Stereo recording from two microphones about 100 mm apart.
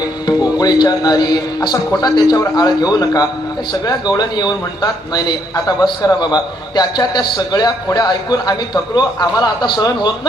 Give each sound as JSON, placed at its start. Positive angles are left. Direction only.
{"t": 0.6, "sound": "a man's voice", "side_deg": 40}